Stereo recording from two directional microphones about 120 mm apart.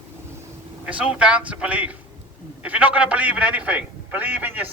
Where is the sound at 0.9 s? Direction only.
10° right (ahead or behind).